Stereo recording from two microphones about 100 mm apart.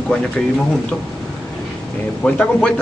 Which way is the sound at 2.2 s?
10° left (ahead or behind).